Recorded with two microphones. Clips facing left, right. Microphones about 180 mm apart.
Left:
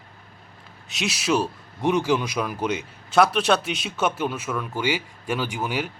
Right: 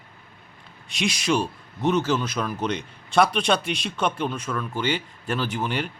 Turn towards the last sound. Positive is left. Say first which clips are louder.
# even
turn(degrees=10)  # may be behind; listen again after turning